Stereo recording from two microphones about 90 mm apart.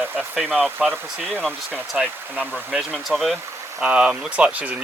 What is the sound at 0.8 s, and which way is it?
Speech, 20° right (ahead or behind).